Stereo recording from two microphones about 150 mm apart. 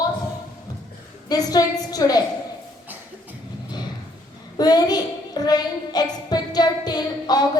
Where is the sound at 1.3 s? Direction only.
25° left (ahead or behind).